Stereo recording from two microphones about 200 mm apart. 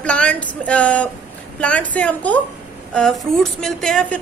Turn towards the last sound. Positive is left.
turn(degrees=5)  # may be behind; listen again after turning